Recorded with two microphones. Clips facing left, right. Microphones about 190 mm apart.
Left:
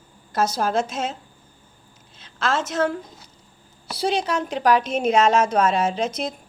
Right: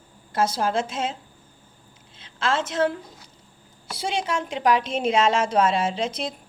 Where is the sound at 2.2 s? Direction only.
30° right (ahead or behind).